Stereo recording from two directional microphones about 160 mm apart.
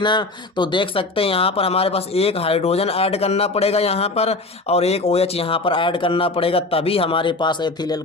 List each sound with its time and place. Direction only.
0.0 s speech: 30° left (ahead or behind)